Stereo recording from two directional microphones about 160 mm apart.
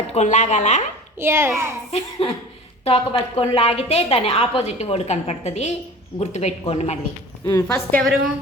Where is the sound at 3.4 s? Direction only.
40° left (ahead or behind).